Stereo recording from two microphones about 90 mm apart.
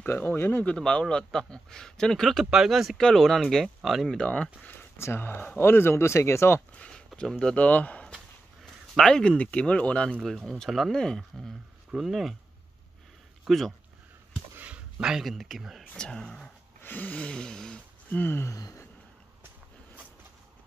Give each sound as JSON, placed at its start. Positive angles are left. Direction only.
{"t": 0.0, "sound": "speech", "side_deg": 20}
{"t": 0.7, "sound": "speech", "side_deg": 10}
{"t": 6.7, "sound": "a sound", "side_deg": 15}
{"t": 7.1, "sound": "speech", "side_deg": 5}
{"t": 10.2, "sound": "speech", "side_deg": 0}
{"t": 13.5, "sound": "speech", "side_deg": 0}
{"t": 14.6, "sound": "speech", "side_deg": -15}
{"t": 16.8, "sound": "a sound", "side_deg": 20}
{"t": 18.5, "sound": "a sound", "side_deg": 40}